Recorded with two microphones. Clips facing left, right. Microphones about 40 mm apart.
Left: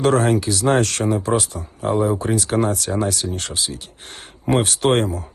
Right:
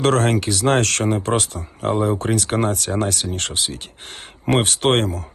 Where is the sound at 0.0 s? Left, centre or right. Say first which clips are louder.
Left 1 dB; right.